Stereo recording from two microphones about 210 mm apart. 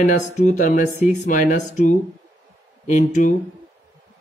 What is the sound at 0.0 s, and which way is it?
Speech, 35° left (ahead or behind).